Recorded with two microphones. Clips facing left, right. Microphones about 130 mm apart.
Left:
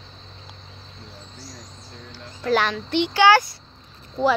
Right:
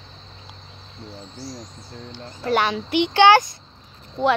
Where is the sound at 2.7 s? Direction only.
20° right (ahead or behind).